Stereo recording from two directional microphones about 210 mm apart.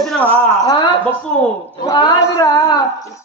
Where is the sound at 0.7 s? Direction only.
20° left (ahead or behind).